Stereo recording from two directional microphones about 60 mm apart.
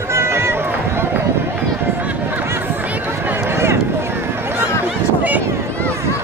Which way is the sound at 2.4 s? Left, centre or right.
Right.